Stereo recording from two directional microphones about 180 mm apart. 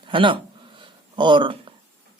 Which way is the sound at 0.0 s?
30° right (ahead or behind).